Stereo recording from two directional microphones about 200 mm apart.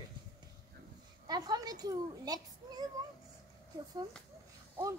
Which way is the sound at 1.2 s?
20° right (ahead or behind).